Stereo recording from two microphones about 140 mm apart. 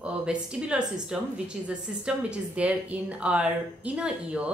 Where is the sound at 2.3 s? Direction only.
10° right (ahead or behind).